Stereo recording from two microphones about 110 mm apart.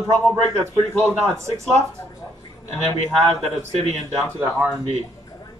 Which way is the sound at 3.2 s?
75° right (ahead or behind).